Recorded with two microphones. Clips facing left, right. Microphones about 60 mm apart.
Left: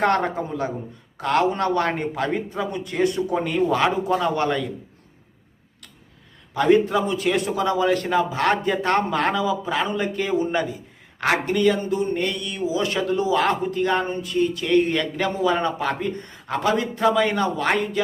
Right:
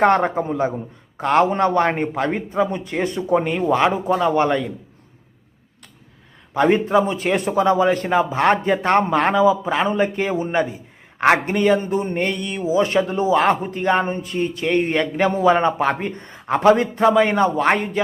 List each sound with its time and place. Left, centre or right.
0.1 s a man's voice: right
6.5 s a man's voice: right
17.7 s speech: right